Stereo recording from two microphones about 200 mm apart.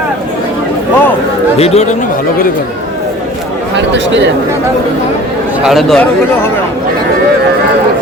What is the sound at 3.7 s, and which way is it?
Speech, 60° right (ahead or behind).